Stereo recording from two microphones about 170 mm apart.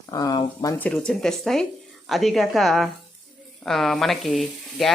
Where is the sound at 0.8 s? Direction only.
5° left (ahead or behind).